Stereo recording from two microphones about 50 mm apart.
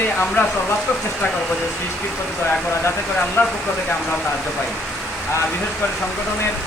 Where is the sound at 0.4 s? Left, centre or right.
Left.